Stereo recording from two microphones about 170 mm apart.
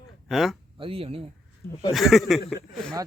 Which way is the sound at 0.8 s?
35° right (ahead or behind).